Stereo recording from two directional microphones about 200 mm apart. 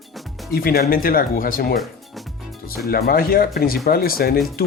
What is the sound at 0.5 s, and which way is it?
Speech, 50° left (ahead or behind).